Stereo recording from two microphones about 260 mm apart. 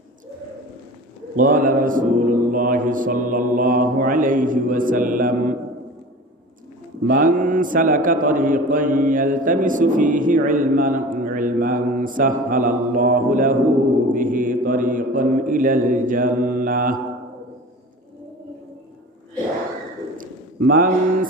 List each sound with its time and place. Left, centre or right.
1.4 s a man's voice: right
7.1 s a man's voice: right
20.1 s a sound: right